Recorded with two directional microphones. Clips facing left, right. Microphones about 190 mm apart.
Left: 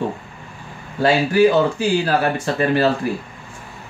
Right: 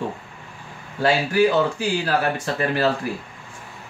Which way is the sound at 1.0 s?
25° left (ahead or behind).